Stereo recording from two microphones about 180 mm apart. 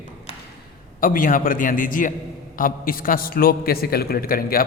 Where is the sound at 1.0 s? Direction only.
50° left (ahead or behind).